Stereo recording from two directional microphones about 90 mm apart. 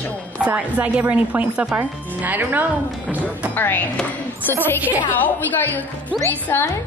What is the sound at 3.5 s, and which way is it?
A woman's voice, 20° left (ahead or behind).